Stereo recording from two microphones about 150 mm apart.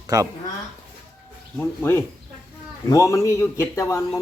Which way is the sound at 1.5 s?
10° left (ahead or behind).